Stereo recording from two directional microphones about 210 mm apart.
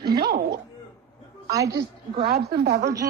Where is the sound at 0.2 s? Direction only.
50° right (ahead or behind).